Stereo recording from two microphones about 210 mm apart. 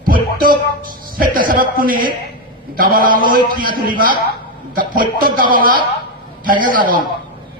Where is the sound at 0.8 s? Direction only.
40° right (ahead or behind).